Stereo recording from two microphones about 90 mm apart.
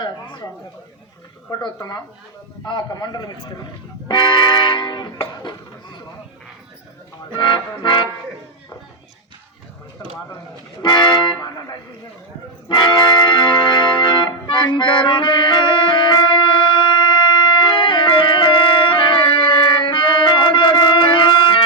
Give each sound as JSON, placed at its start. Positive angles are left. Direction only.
{"t": 0.0, "sound": "a sound", "side_deg": 60}
{"t": 1.5, "sound": "a man's voice", "side_deg": 40}
{"t": 4.1, "sound": "music", "side_deg": 55}
{"t": 5.2, "sound": "speech", "side_deg": 60}
{"t": 7.3, "sound": "music", "side_deg": 60}
{"t": 10.8, "sound": "music", "side_deg": 60}
{"t": 11.3, "sound": "a man's voice", "side_deg": 45}
{"t": 12.6, "sound": "music", "side_deg": 60}